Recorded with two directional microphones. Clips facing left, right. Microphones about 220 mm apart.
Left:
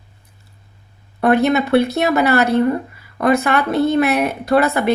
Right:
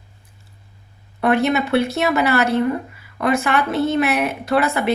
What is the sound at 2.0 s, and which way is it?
A woman's voice, 35° left (ahead or behind).